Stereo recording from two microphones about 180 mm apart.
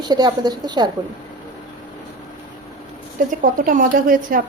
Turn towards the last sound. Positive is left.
turn(degrees=-50)  # may be behind; listen again after turning